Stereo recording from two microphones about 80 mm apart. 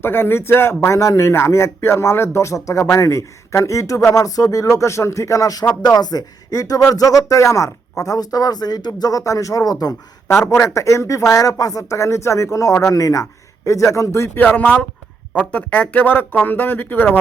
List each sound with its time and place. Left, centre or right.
0.0 s a man's voice: left
10.2 s a man's voice: left
14.4 s speech: left